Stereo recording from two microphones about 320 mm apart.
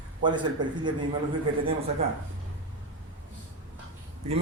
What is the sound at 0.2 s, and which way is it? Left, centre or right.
Speech, centre.